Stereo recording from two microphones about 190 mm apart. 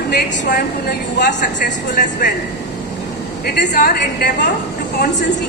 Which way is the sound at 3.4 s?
55° left (ahead or behind).